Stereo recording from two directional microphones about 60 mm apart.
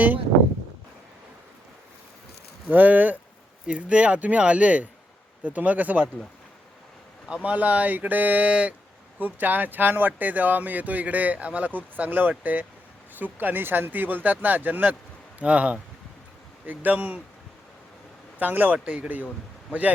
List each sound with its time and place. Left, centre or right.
2.6 s speech: right
7.4 s speech: right
15.4 s speech: right
18.3 s speech: right